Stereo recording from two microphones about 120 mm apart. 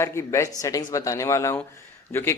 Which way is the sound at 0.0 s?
25° left (ahead or behind).